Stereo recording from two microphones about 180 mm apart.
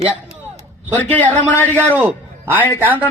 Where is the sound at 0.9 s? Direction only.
10° left (ahead or behind).